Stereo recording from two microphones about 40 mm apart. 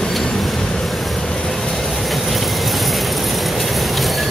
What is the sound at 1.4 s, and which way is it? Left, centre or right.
Vehicle, centre.